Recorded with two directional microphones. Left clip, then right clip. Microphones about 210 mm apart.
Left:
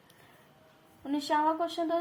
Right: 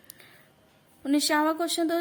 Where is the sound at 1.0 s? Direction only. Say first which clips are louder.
Right 4 dB; 30° right (ahead or behind).